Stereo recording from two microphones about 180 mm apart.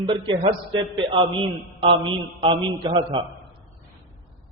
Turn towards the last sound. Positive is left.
turn(degrees=-25)  # may be behind; listen again after turning